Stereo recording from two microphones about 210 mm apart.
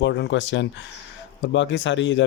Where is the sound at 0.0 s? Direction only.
60° left (ahead or behind).